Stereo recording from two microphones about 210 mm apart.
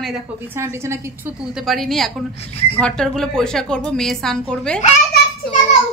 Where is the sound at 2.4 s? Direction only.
30° left (ahead or behind).